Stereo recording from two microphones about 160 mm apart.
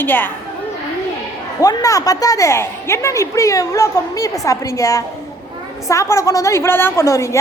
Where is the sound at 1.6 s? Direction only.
20° left (ahead or behind).